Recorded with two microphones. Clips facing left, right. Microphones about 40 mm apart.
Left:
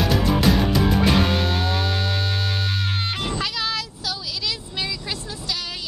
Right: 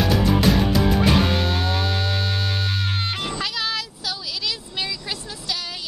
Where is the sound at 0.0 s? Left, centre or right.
Centre.